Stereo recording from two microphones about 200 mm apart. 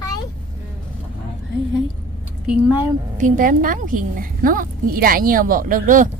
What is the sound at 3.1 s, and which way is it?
A woman's voice, 40° right (ahead or behind).